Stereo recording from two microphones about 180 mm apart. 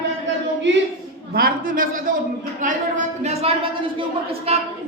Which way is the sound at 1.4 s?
50° right (ahead or behind).